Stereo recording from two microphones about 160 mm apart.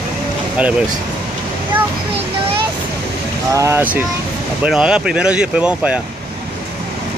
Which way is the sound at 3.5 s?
20° right (ahead or behind).